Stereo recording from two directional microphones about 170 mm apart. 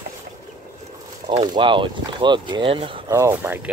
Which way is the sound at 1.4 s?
30° right (ahead or behind).